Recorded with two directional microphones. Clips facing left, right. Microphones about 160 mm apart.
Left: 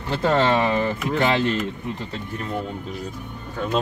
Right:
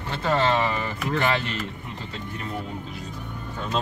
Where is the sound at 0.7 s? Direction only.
20° left (ahead or behind).